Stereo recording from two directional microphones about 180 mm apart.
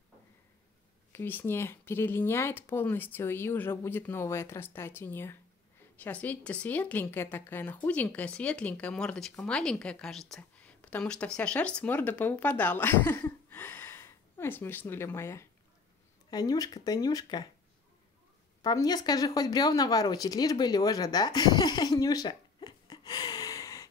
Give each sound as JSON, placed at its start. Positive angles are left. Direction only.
{"t": 1.1, "sound": "speech", "side_deg": 10}
{"t": 18.6, "sound": "speech", "side_deg": 20}